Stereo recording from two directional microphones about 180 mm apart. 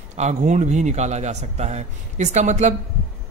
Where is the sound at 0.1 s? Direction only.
40° right (ahead or behind).